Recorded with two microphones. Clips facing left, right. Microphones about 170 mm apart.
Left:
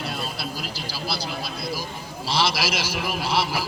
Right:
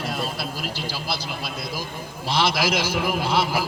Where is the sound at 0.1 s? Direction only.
45° right (ahead or behind).